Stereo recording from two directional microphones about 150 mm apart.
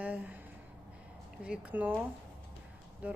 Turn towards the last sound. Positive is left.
turn(degrees=-10)  # may be behind; listen again after turning